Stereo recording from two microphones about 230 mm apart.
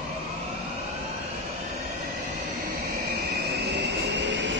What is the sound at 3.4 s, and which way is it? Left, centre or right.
Train, right.